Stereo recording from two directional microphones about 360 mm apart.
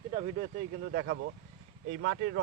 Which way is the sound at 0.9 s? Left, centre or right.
Right.